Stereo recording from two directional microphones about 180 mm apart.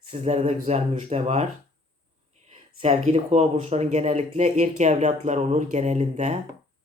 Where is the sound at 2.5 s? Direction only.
40° right (ahead or behind).